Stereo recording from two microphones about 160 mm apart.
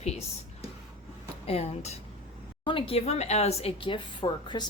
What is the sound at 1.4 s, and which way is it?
A woman's voice, 40° left (ahead or behind).